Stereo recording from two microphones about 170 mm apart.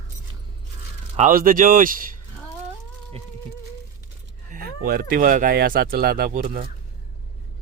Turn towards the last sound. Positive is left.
turn(degrees=-50)  # may be behind; listen again after turning